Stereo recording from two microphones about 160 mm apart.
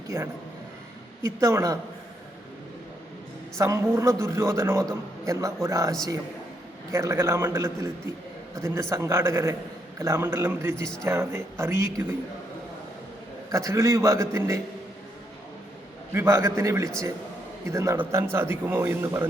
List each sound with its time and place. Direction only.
0.1 s a man's voice: 15° right (ahead or behind)
3.6 s a woman's voice: 20° right (ahead or behind)
13.5 s a man's voice: 20° right (ahead or behind)
16.1 s a man's voice: 15° right (ahead or behind)